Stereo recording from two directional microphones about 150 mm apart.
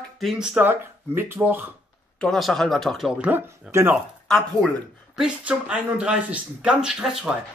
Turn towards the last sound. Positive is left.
turn(degrees=-5)  # may be behind; listen again after turning